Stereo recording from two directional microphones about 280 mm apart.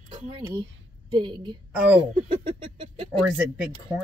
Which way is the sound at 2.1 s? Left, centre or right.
Right.